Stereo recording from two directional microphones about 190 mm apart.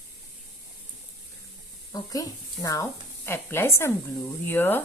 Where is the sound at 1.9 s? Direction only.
20° left (ahead or behind).